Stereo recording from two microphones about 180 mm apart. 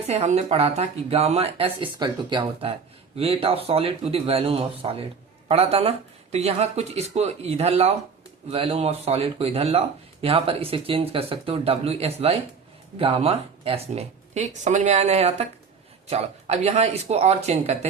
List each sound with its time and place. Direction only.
0.1 s speech: 35° right (ahead or behind)